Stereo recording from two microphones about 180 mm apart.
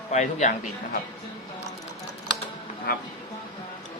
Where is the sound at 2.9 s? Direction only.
60° left (ahead or behind).